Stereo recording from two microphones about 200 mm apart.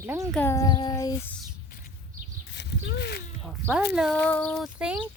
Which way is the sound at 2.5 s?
65° left (ahead or behind).